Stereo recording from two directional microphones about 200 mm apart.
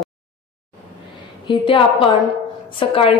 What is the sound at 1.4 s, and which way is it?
A woman's voice, 25° left (ahead or behind).